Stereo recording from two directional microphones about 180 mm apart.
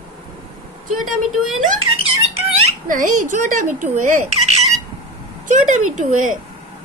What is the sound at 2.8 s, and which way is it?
A woman's voice, 45° right (ahead or behind).